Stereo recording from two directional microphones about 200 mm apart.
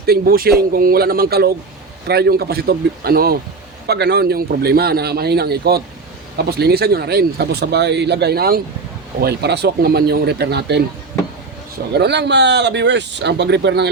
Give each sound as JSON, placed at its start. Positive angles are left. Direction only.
{"t": 0.0, "sound": "speech", "side_deg": -50}
{"t": 11.9, "sound": "speech", "side_deg": -60}